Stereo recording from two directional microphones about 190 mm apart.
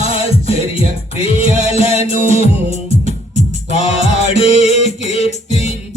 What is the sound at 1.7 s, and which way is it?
Music, 35° left (ahead or behind).